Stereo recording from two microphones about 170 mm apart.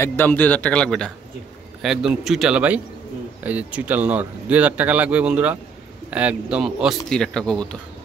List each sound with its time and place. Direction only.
0.0 s a man's voice: 15° left (ahead or behind)